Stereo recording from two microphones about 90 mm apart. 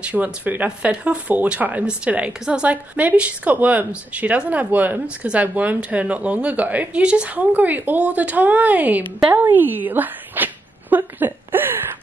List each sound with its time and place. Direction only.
0.0 s speech: 20° right (ahead or behind)